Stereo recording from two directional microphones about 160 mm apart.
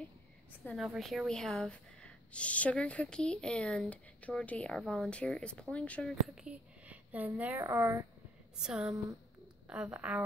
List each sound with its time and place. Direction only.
0.7 s speech: centre (ahead or behind)
8.5 s speech: 5° right (ahead or behind)